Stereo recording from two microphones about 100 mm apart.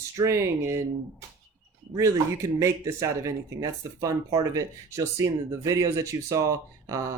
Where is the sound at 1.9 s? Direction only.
30° right (ahead or behind).